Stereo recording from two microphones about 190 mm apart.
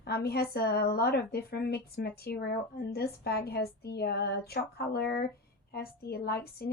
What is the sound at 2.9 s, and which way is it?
Speech, 55° left (ahead or behind).